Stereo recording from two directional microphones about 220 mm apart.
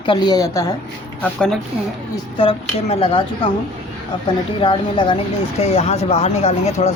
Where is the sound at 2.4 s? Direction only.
25° left (ahead or behind).